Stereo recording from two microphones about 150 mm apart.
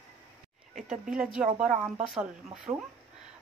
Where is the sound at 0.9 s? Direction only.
5° right (ahead or behind).